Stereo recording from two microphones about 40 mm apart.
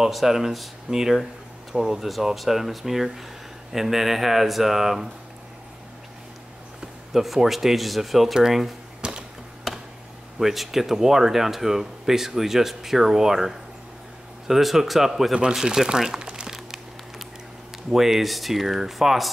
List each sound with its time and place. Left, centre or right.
0.1 s speech: centre
6.8 s speech: centre
9.0 s a sound: right
10.4 s speech: centre
15.6 s speech: centre
16.3 s a sound: right
17.9 s speech: centre